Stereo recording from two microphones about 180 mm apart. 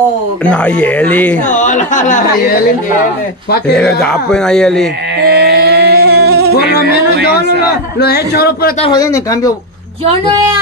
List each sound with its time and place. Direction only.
0.5 s speech: 5° left (ahead or behind)
1.5 s a woman's voice: 45° left (ahead or behind)
3.7 s speech: 5° left (ahead or behind)
5.2 s a sound: 65° right (ahead or behind)
8.0 s speech: 60° left (ahead or behind)
8.8 s speech: 20° left (ahead or behind)
10.0 s a woman's voice: 30° right (ahead or behind)